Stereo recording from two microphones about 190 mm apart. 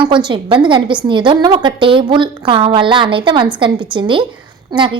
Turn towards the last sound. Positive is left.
turn(degrees=-25)  # may be behind; listen again after turning